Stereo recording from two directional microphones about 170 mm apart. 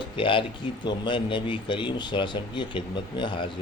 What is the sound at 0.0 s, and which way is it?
Speech, 30° left (ahead or behind).